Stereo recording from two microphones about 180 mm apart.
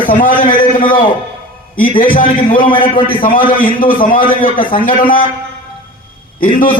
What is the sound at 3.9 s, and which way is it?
Speech, 30° left (ahead or behind).